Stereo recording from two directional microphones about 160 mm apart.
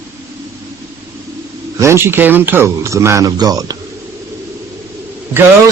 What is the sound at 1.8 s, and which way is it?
A man's voice, 15° right (ahead or behind).